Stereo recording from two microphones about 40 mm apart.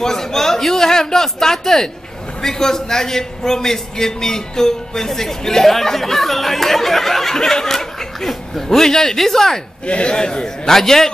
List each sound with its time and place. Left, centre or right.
0.0 s a man's voice: centre
9.8 s a man's voice: left